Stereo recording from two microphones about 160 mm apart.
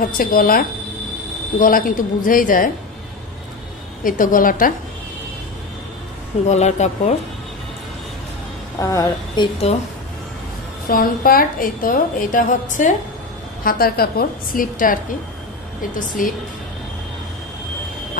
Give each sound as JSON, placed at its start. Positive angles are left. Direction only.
{"t": 0.0, "sound": "a woman's voice", "side_deg": 65}
{"t": 4.0, "sound": "a woman's voice", "side_deg": 55}
{"t": 6.5, "sound": "speech", "side_deg": 45}
{"t": 8.7, "sound": "speech", "side_deg": 20}
{"t": 10.9, "sound": "a woman's voice", "side_deg": 65}
{"t": 13.7, "sound": "a woman's voice", "side_deg": 70}
{"t": 16.2, "sound": "a woman's voice", "side_deg": 60}